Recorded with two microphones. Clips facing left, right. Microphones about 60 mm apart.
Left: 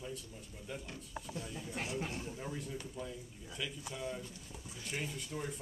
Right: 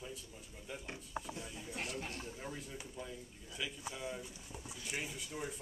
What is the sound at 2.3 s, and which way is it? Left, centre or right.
Speech, centre.